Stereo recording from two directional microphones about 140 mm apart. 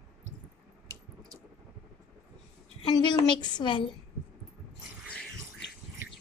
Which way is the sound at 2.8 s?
30° left (ahead or behind).